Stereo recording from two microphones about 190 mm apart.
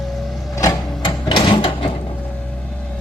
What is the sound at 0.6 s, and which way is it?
Printer, 20° left (ahead or behind).